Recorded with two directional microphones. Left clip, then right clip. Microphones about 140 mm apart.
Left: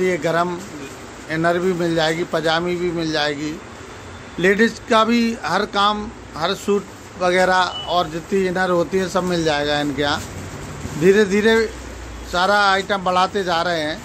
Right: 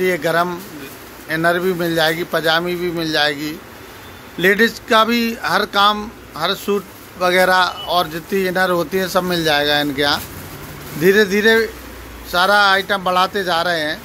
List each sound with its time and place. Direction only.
0.0 s a man's voice: 5° right (ahead or behind)